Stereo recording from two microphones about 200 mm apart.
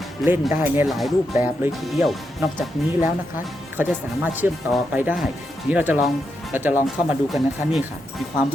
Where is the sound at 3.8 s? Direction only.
10° right (ahead or behind).